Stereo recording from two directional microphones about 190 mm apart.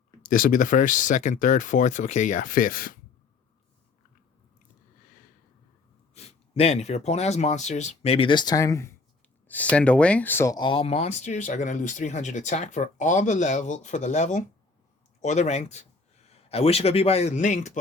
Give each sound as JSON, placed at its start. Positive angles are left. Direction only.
{"t": 0.2, "sound": "speech", "side_deg": 45}
{"t": 6.1, "sound": "speech", "side_deg": 35}